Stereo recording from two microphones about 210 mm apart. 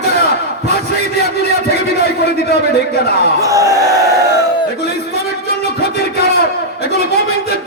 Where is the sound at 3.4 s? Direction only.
15° right (ahead or behind).